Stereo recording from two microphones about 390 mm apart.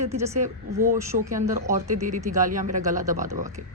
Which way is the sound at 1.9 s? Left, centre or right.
Centre.